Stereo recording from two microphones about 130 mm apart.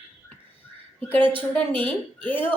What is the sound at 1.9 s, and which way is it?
Speech, 15° left (ahead or behind).